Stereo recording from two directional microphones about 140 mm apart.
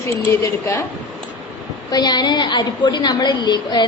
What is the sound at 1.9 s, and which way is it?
A woman's voice, 30° left (ahead or behind).